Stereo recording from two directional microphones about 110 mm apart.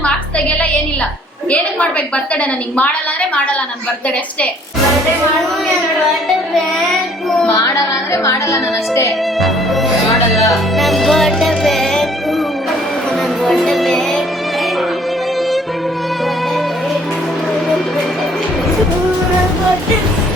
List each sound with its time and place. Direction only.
0.0 s a sound: 15° left (ahead or behind)
1.5 s a woman's voice: 10° left (ahead or behind)
6.2 s child singing: centre (ahead or behind)
7.6 s speech: 30° left (ahead or behind)
10.3 s music: centre (ahead or behind)
13.4 s music: centre (ahead or behind)